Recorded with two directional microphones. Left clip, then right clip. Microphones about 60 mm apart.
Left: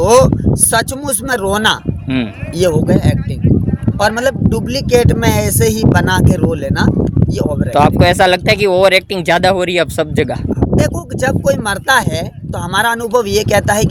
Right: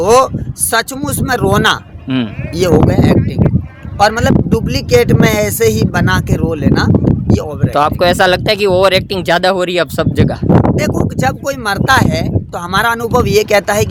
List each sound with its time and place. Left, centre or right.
0.0 s speech: right
7.7 s speech: centre
10.8 s speech: right